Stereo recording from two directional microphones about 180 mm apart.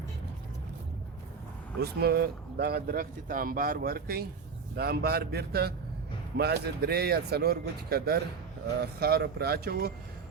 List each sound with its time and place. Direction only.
1.8 s speech: 60° right (ahead or behind)